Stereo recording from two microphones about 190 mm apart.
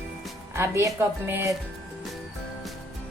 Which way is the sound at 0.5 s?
15° right (ahead or behind).